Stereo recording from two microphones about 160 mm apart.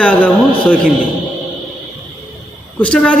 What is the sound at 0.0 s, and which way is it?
Speech, 10° left (ahead or behind).